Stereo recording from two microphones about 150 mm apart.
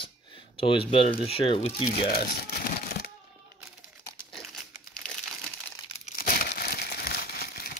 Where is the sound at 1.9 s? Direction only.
90° left.